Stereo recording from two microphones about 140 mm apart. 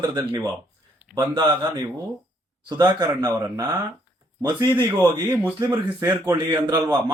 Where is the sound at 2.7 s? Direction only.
30° right (ahead or behind).